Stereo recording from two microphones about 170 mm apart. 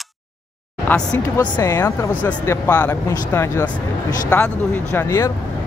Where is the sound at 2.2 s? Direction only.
10° left (ahead or behind).